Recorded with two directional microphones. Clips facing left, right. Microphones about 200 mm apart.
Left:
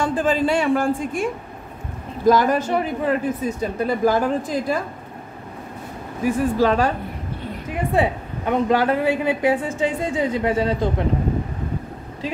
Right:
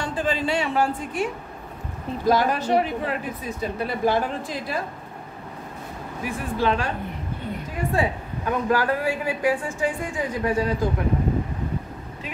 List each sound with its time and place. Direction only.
0.0 s speech: 50° left (ahead or behind)
6.2 s speech: 40° left (ahead or behind)
7.9 s speech: 25° left (ahead or behind)